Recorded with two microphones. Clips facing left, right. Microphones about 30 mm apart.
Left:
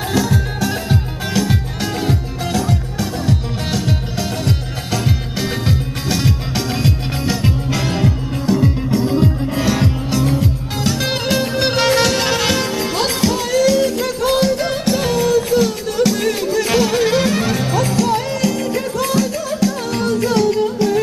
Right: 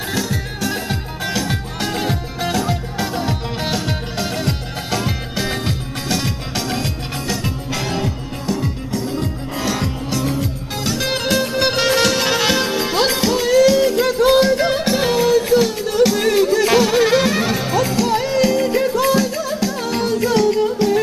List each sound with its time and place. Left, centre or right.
0.1 s music: centre
9.0 s music: left
9.2 s music: centre